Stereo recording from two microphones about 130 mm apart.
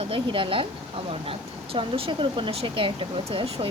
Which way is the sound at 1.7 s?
45° right (ahead or behind).